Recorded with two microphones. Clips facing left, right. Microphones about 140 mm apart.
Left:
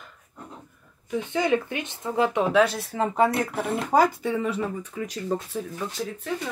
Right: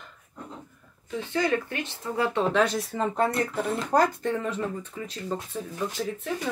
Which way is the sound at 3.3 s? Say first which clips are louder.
Left 1 dB; 75° left (ahead or behind).